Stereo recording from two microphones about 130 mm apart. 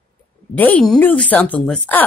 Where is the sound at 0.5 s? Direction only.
10° left (ahead or behind).